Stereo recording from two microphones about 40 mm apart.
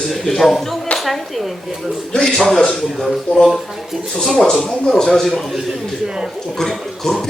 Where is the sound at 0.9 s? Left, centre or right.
Centre.